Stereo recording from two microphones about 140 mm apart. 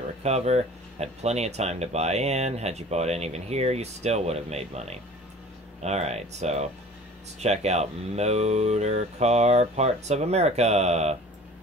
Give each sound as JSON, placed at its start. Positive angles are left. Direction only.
{"t": 0.2, "sound": "speech", "side_deg": -50}